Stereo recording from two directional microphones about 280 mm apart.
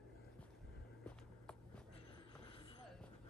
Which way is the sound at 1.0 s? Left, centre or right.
Centre.